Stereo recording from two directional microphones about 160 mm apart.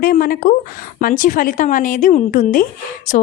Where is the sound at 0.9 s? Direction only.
55° left (ahead or behind).